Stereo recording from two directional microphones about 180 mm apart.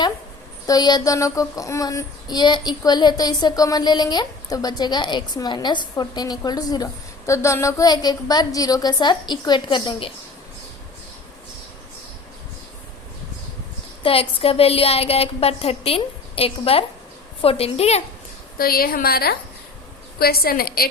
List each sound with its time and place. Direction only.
0.7 s child singing: 25° left (ahead or behind)
14.0 s a woman's voice: 30° left (ahead or behind)
18.5 s a woman's voice: 55° left (ahead or behind)